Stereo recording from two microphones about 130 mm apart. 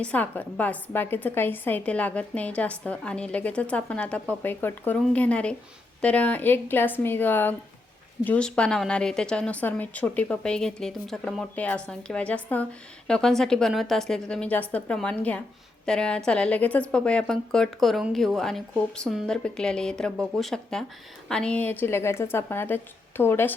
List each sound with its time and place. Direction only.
0.0 s a woman's voice: 10° left (ahead or behind)